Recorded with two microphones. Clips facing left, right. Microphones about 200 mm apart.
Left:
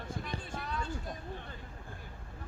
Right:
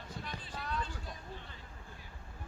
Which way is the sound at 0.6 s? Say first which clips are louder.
Right 2 dB; centre (ahead or behind).